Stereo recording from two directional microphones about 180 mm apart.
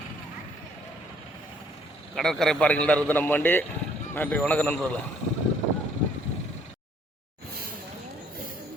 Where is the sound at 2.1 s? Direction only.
Centre (ahead or behind).